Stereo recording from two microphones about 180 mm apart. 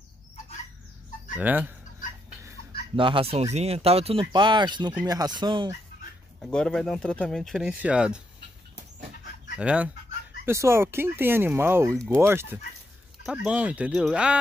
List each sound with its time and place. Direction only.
1.4 s speech: 10° right (ahead or behind)
3.0 s speech: 30° right (ahead or behind)
6.4 s speech: 5° left (ahead or behind)
9.6 s speech: 5° right (ahead or behind)